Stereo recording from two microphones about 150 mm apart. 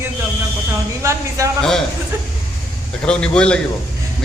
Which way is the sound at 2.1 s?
20° right (ahead or behind).